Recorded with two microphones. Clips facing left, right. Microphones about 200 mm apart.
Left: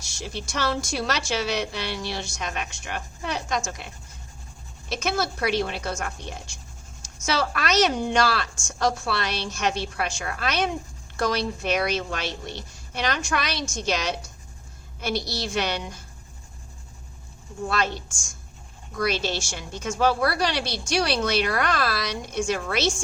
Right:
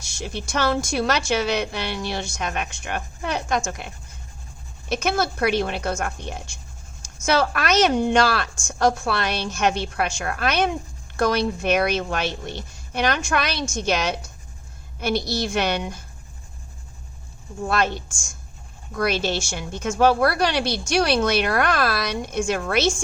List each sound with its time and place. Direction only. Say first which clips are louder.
0.2 s a woman's voice: right 4 dB; 55° right (ahead or behind)
4.9 s a woman's voice: right 4 dB; 55° right (ahead or behind)
7.3 s a woman's voice: right 4 dB; 55° right (ahead or behind)
18.9 s a woman's voice: right 3 dB; 55° right (ahead or behind)